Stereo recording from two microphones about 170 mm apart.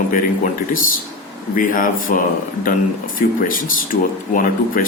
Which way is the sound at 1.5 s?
50° left (ahead or behind).